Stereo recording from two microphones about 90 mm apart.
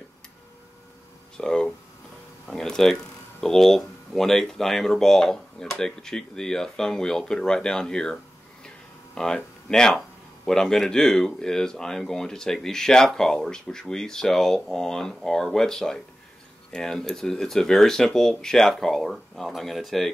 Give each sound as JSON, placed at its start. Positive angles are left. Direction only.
{"t": 1.3, "sound": "speech", "side_deg": 10}